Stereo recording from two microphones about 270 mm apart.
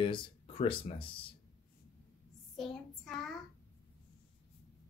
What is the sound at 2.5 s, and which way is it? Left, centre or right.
Child singing, centre.